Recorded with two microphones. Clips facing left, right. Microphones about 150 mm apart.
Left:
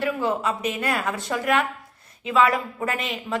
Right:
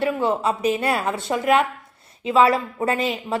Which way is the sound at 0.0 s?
30° right (ahead or behind).